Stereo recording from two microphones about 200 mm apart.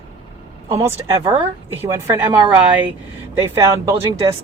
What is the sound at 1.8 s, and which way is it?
Speech, 15° right (ahead or behind).